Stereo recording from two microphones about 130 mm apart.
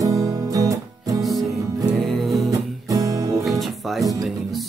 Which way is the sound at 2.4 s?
25° right (ahead or behind).